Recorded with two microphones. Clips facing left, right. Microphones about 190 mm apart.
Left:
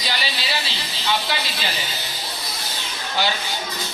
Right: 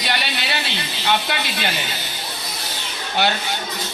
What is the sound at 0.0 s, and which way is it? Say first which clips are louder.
A woman's voice: right 3 dB; 60° right (ahead or behind).